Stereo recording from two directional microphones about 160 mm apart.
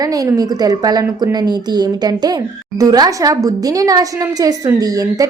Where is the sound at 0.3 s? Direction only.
25° right (ahead or behind).